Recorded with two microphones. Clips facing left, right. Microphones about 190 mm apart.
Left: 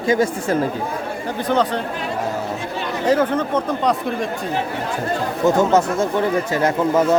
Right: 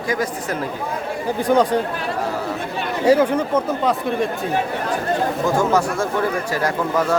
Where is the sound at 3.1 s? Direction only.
10° right (ahead or behind).